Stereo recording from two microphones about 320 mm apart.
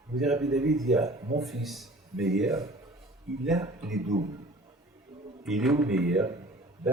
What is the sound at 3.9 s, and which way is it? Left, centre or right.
Speech, right.